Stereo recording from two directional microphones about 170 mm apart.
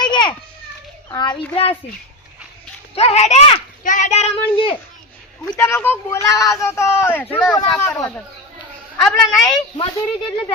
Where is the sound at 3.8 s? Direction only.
50° left (ahead or behind).